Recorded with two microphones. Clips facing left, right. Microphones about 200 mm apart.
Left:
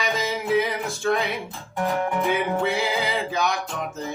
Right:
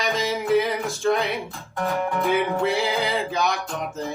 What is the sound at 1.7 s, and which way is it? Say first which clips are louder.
Music: left 1 dB; 15° left (ahead or behind).